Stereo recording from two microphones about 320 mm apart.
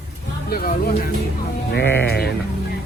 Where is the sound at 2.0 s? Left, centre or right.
Left.